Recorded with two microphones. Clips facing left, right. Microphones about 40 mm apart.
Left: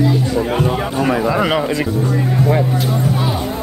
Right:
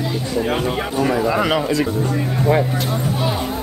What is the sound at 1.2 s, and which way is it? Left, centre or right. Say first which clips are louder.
Speech: left 2 dB; centre.